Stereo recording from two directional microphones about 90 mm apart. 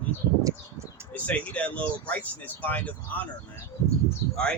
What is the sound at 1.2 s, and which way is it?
Speech, 15° left (ahead or behind).